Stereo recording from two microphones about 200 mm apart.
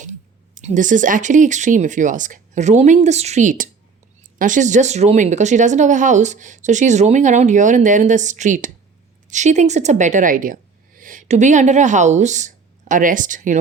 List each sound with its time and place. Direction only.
0.0 s speech: 40° right (ahead or behind)